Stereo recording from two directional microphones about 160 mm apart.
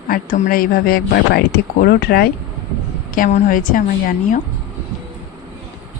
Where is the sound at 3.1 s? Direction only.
55° left (ahead or behind).